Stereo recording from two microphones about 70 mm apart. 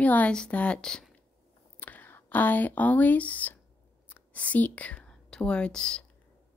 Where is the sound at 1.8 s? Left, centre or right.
Left.